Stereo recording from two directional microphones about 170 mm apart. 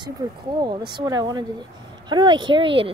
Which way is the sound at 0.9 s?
25° right (ahead or behind).